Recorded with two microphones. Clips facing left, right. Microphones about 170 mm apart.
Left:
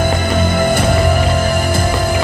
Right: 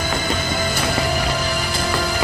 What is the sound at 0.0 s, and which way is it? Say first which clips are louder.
Music: left 7 dB; 55° left (ahead or behind).